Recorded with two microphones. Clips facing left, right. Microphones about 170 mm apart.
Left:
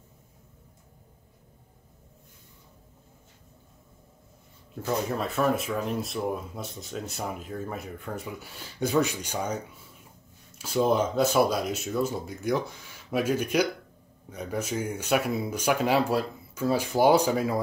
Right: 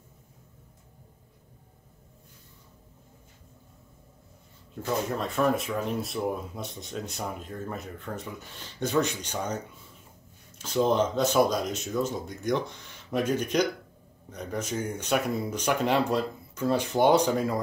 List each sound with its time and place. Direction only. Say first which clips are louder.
5.1 s speech: right 1 dB; 5° left (ahead or behind)
10.6 s speech: even; 10° left (ahead or behind)